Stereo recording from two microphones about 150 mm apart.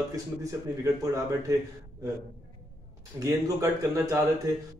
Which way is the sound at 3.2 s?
20° right (ahead or behind).